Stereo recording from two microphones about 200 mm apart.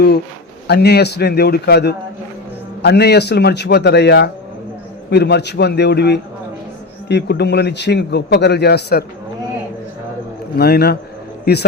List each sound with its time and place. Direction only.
0.7 s a man's voice: 55° left (ahead or behind)
10.6 s a man's voice: 55° left (ahead or behind)